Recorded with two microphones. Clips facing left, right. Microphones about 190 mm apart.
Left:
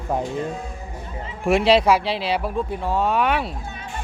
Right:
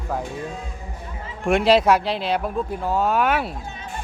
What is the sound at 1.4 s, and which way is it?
Speech, centre (ahead or behind).